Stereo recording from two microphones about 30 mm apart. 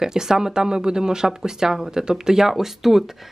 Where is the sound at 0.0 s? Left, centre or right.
Centre.